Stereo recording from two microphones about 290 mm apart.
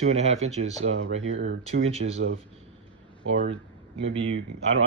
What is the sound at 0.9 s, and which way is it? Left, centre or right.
Speech, right.